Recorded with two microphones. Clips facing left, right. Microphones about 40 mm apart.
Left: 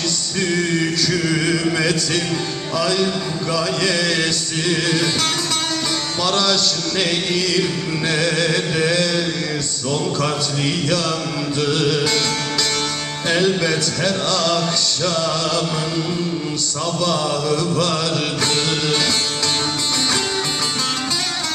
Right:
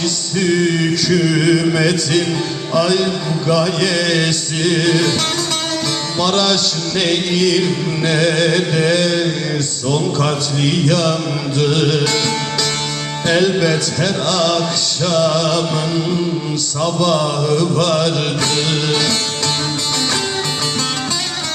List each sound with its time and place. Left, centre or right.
0.3 s music: centre
6.5 s music: centre
10.7 s music: centre
13.2 s music: centre
15.4 s a man's voice: centre
16.8 s a man's voice: right
18.5 s music: centre